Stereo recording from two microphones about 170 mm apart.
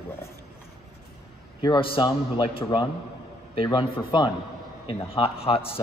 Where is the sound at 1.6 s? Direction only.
25° left (ahead or behind).